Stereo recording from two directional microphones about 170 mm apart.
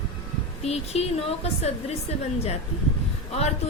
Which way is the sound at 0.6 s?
40° left (ahead or behind).